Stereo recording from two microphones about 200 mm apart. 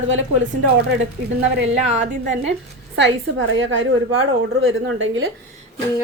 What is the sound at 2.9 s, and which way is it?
Speech, 65° right (ahead or behind).